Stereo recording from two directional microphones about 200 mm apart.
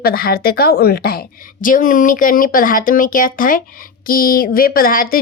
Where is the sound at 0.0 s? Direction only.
50° left (ahead or behind).